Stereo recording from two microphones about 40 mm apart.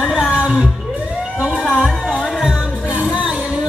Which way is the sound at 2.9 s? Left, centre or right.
Right.